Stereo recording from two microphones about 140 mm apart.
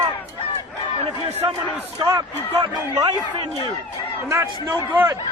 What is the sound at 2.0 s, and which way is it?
A man's voice, 30° right (ahead or behind).